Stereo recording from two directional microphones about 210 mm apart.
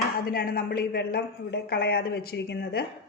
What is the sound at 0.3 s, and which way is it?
Speech, 45° left (ahead or behind).